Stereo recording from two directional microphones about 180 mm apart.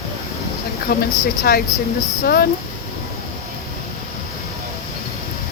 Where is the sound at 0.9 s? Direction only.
60° left (ahead or behind).